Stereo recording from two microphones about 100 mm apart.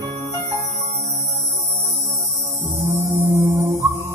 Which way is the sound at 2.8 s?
25° right (ahead or behind).